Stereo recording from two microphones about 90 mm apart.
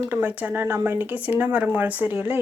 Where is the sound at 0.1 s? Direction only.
20° right (ahead or behind).